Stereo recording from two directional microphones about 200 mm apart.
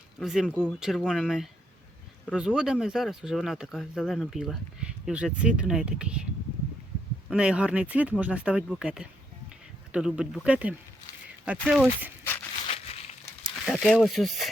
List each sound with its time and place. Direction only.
0.2 s speech: centre (ahead or behind)
7.3 s speech: 5° right (ahead or behind)
11.5 s speech: 5° left (ahead or behind)
11.8 s speech: 10° right (ahead or behind)
12.6 s crumpling: 30° left (ahead or behind)
13.7 s speech: 5° left (ahead or behind)